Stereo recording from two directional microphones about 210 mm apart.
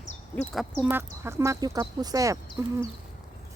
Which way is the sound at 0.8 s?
10° right (ahead or behind).